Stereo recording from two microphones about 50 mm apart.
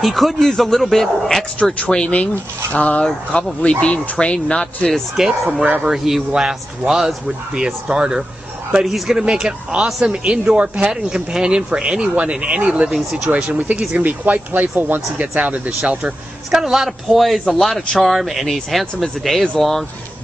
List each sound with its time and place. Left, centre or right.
0.0 s a man's voice: centre
0.4 s a man's voice: centre
1.6 s speech: centre
5.1 s speech: centre
7.2 s speech: centre
8.8 s a man's voice: centre; by 15.7 s right
16.4 s a man's voice: centre